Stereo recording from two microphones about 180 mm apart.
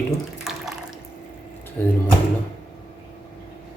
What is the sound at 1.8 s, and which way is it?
Speech, 10° left (ahead or behind).